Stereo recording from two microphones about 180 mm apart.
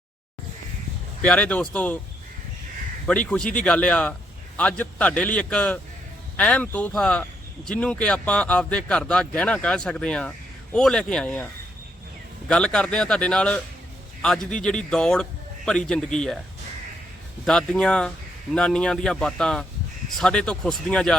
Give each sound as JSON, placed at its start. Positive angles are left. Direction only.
{"t": 1.2, "sound": "a man's voice", "side_deg": 5}
{"t": 3.1, "sound": "a man's voice", "side_deg": 5}
{"t": 12.5, "sound": "speech", "side_deg": 5}
{"t": 17.4, "sound": "speech", "side_deg": 5}